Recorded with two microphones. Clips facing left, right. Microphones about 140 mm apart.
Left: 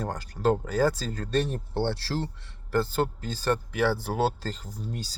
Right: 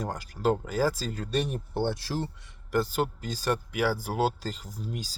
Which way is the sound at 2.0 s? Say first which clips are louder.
Left 1 dB; 15° right (ahead or behind).